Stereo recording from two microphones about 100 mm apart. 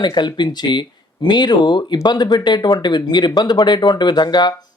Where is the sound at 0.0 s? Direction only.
50° left (ahead or behind).